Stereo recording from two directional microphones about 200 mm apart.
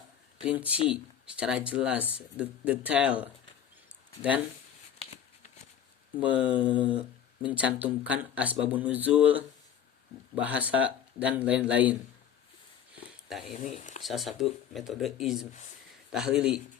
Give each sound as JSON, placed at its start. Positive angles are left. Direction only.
{"t": 0.4, "sound": "speech", "side_deg": -5}
{"t": 6.1, "sound": "speech", "side_deg": -5}
{"t": 13.3, "sound": "speech", "side_deg": 0}
{"t": 13.7, "sound": "speech", "side_deg": 40}
{"t": 14.0, "sound": "speech", "side_deg": 0}